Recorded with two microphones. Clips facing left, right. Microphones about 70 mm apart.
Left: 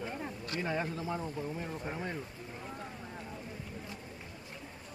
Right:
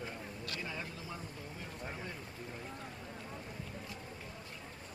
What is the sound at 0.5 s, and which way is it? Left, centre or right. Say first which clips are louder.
Speech: left 11 dB; left.